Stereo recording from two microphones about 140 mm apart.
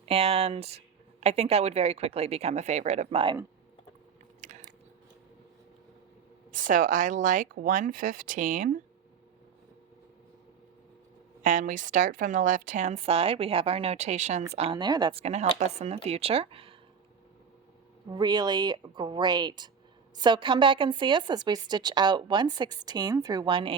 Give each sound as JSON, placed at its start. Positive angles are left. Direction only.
{"t": 0.0, "sound": "speech", "side_deg": -45}
{"t": 4.4, "sound": "a sound", "side_deg": -60}
{"t": 6.5, "sound": "speech", "side_deg": -70}
{"t": 11.4, "sound": "a woman's voice", "side_deg": -70}
{"t": 14.5, "sound": "a woman's voice", "side_deg": -40}
{"t": 15.1, "sound": "speech", "side_deg": -50}
{"t": 18.1, "sound": "a woman's voice", "side_deg": -30}